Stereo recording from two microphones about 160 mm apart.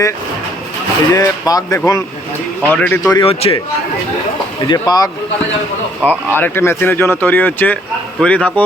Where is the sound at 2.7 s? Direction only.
10° left (ahead or behind).